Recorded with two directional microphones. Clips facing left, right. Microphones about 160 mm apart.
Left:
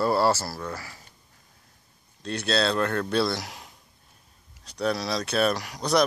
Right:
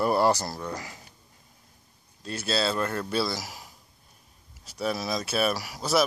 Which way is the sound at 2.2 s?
5° right (ahead or behind).